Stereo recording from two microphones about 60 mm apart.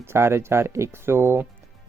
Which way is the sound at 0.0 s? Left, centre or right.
Right.